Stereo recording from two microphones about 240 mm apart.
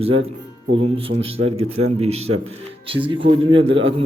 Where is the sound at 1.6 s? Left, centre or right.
Right.